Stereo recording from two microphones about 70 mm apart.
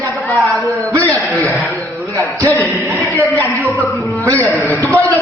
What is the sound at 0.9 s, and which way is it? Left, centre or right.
Speech, right.